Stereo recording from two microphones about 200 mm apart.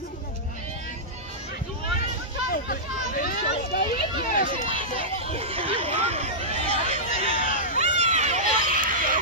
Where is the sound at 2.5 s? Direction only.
45° left (ahead or behind).